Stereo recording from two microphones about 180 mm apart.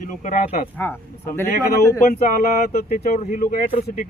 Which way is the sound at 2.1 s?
55° left (ahead or behind).